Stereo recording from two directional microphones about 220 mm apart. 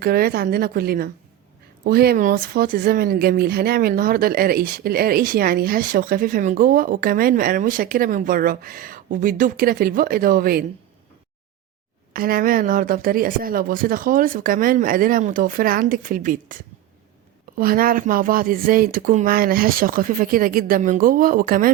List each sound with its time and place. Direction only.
0.0 s a woman's voice: 45° right (ahead or behind)
12.1 s speech: 40° right (ahead or behind)